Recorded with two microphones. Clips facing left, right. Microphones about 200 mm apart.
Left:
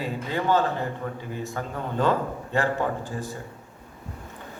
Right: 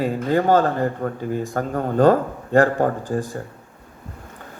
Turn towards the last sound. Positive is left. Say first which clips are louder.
# right 7 dB
turn(degrees=-45)  # may be behind; listen again after turning